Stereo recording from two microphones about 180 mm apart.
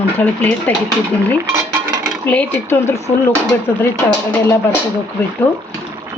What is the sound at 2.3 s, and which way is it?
Speech, 10° left (ahead or behind).